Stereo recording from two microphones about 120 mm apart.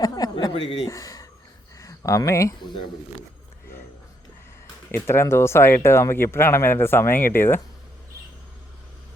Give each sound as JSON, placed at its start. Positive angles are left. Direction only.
{"t": 0.0, "sound": "a sound", "side_deg": 30}
{"t": 1.8, "sound": "speech", "side_deg": 25}
{"t": 4.9, "sound": "speech", "side_deg": 20}